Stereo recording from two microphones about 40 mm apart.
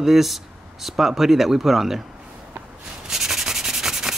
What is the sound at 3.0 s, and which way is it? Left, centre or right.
Rub, centre.